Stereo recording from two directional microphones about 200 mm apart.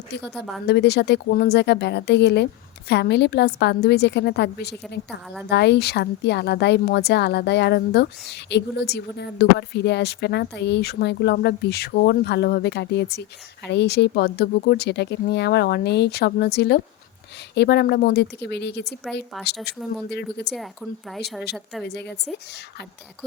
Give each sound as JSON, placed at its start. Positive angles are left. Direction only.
{"t": 0.3, "sound": "a woman's voice", "side_deg": 0}
{"t": 0.7, "sound": "speech", "side_deg": 55}
{"t": 21.1, "sound": "a woman's voice", "side_deg": 5}
{"t": 21.8, "sound": "speech", "side_deg": 55}